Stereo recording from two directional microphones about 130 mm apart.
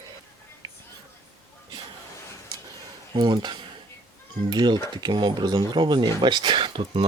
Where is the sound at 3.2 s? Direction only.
35° right (ahead or behind).